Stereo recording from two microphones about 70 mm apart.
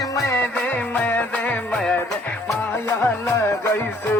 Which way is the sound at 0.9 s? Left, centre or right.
Left.